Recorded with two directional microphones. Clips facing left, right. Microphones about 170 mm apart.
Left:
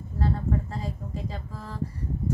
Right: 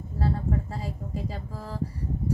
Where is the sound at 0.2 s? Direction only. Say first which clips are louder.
Even; 10° right (ahead or behind).